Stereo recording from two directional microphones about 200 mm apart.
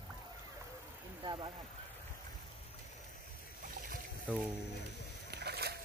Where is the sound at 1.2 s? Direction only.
25° right (ahead or behind).